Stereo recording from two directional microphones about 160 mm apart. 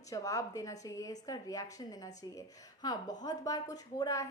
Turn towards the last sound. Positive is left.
turn(degrees=20)  # may be behind; listen again after turning